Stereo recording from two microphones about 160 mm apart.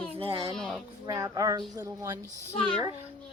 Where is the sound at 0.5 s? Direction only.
5° left (ahead or behind).